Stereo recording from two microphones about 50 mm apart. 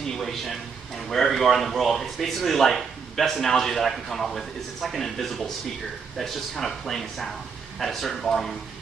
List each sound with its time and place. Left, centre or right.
0.0 s a man's voice: centre
6.5 s a man's voice: centre